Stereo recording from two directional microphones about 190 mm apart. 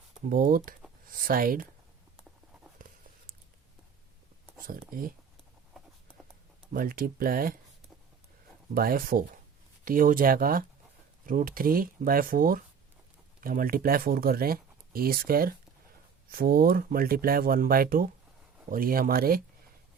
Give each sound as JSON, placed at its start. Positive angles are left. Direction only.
{"t": 0.3, "sound": "speech", "side_deg": -45}
{"t": 2.7, "sound": "a sound", "side_deg": -45}
{"t": 4.9, "sound": "speech", "side_deg": -50}
{"t": 6.7, "sound": "speech", "side_deg": -50}
{"t": 8.7, "sound": "speech", "side_deg": -50}